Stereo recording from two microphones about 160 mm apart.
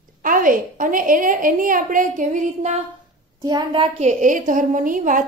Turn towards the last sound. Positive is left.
turn(degrees=-55)  # may be behind; listen again after turning